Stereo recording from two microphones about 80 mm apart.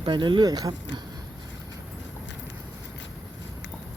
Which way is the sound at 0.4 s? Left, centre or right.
Right.